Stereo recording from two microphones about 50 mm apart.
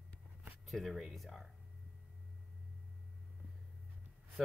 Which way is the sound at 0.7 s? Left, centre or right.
Centre.